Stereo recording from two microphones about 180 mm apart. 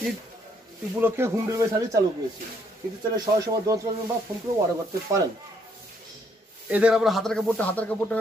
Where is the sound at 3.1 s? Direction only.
20° right (ahead or behind).